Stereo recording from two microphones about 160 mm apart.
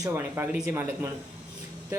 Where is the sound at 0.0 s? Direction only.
15° right (ahead or behind).